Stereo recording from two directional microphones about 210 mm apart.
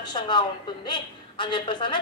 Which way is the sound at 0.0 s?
20° left (ahead or behind).